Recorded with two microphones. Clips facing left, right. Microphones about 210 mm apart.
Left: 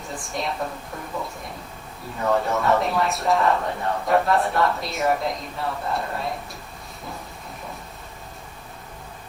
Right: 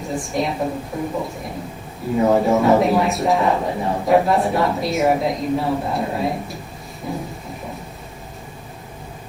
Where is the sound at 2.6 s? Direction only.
Centre (ahead or behind).